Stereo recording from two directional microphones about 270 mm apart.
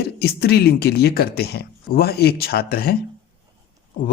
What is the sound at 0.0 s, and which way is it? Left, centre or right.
Speech, left.